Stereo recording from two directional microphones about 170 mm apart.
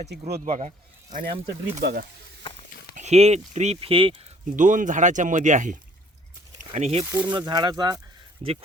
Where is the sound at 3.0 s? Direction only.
40° right (ahead or behind).